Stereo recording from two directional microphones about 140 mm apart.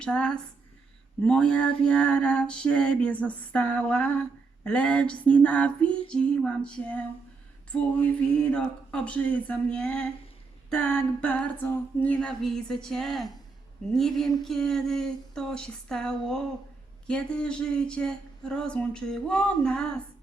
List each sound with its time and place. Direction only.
0.0 s female singing: 5° left (ahead or behind)
10.7 s a sound: 5° left (ahead or behind)
17.1 s female singing: 5° left (ahead or behind)